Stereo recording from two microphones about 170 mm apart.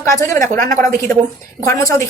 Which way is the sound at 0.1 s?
20° left (ahead or behind).